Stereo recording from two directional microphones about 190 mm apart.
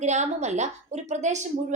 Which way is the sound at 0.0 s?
35° right (ahead or behind).